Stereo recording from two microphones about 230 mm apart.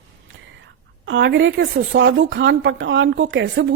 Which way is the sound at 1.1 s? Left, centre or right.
Right.